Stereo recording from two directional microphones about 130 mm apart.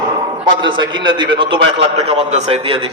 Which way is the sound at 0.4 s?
35° right (ahead or behind).